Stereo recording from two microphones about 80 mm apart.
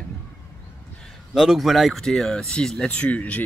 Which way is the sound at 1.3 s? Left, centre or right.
Centre.